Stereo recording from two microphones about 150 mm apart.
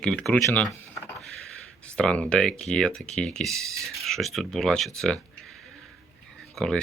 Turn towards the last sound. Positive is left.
turn(degrees=5)  # may be behind; listen again after turning